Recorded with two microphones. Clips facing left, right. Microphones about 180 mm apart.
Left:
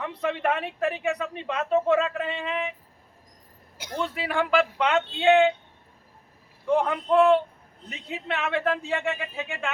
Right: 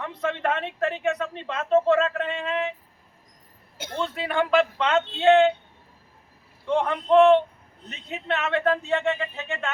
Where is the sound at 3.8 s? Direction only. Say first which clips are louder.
Right 1 dB; 25° right (ahead or behind).